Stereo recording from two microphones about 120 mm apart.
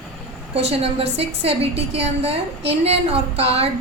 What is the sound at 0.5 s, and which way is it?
Speech, 55° right (ahead or behind).